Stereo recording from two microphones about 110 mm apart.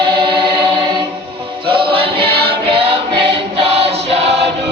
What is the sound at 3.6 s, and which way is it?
Choir, 65° right (ahead or behind).